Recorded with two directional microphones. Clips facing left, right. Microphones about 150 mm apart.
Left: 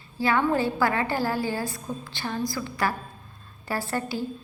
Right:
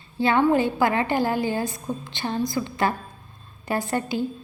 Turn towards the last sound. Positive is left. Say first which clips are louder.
# right 4 dB
turn(degrees=-20)  # may be behind; listen again after turning